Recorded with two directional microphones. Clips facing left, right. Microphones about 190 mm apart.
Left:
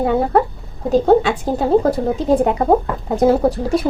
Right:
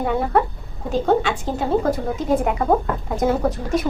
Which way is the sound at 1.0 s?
35° left (ahead or behind).